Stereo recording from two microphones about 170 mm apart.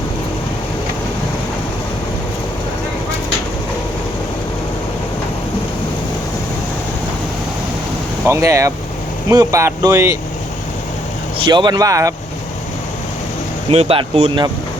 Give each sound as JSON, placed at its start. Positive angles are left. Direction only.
{"t": 8.3, "sound": "speech", "side_deg": -20}
{"t": 11.3, "sound": "speech", "side_deg": -25}
{"t": 13.7, "sound": "speech", "side_deg": -35}